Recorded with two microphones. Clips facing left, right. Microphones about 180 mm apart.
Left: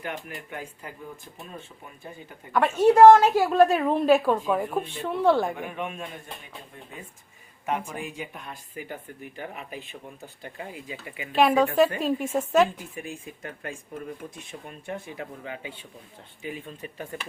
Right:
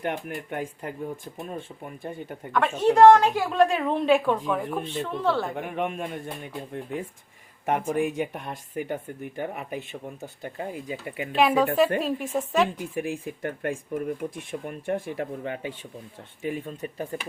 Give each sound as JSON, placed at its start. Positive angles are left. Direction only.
{"t": 0.0, "sound": "speech", "side_deg": -60}
{"t": 2.5, "sound": "a woman's voice", "side_deg": 10}
{"t": 5.6, "sound": "speech", "side_deg": -60}
{"t": 7.6, "sound": "speech", "side_deg": -50}
{"t": 11.3, "sound": "a woman's voice", "side_deg": 0}
{"t": 12.9, "sound": "speech", "side_deg": -60}